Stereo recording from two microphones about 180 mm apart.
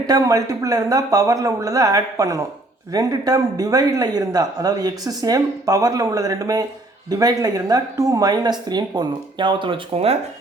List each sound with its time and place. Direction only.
0.1 s speech: 20° right (ahead or behind)